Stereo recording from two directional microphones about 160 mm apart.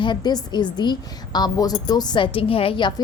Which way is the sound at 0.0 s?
25° left (ahead or behind).